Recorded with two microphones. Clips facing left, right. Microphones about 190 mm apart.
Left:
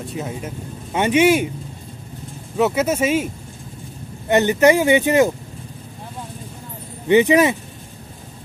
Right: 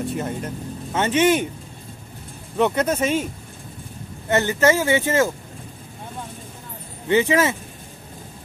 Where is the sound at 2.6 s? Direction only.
5° left (ahead or behind).